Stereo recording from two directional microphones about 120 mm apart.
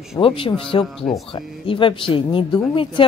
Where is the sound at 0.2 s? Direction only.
45° left (ahead or behind).